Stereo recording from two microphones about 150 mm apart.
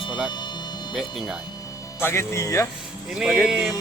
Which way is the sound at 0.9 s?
Centre (ahead or behind).